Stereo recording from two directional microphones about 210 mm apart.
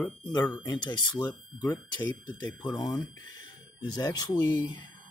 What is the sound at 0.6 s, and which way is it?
Speech, 20° left (ahead or behind).